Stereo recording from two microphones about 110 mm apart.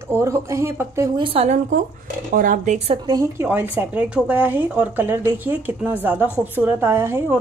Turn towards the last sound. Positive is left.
turn(degrees=-20)  # may be behind; listen again after turning